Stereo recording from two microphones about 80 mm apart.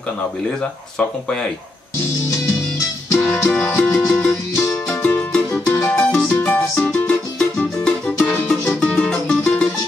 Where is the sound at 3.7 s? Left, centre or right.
Left.